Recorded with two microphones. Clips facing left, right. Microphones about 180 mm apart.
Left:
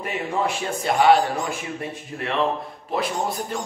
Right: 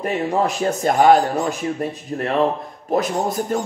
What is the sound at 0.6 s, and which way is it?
A man's voice, 40° right (ahead or behind).